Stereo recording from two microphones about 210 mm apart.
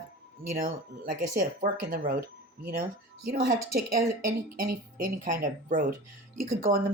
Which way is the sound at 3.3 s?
45° right (ahead or behind).